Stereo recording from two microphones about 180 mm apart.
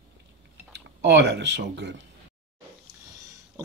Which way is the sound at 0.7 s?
70° right (ahead or behind).